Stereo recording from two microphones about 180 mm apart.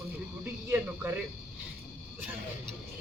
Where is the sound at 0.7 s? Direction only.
10° right (ahead or behind).